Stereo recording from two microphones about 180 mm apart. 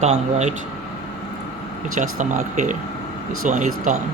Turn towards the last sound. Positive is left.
turn(degrees=-45)  # may be behind; listen again after turning